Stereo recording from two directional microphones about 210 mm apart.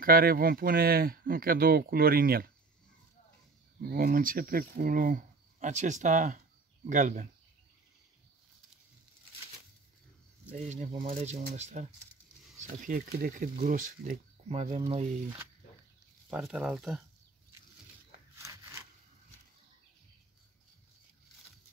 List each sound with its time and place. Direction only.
0.0 s speech: 45° right (ahead or behind)
3.8 s speech: 45° right (ahead or behind)
10.5 s speech: 35° right (ahead or behind)
16.3 s speech: 5° right (ahead or behind)
18.4 s a sound: 15° right (ahead or behind)